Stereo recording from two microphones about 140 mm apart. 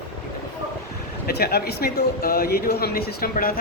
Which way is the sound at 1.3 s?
90° left.